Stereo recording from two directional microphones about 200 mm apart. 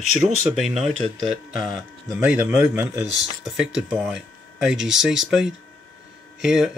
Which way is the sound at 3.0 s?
5° right (ahead or behind).